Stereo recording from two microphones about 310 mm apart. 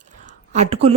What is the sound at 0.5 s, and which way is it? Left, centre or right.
Speech, centre.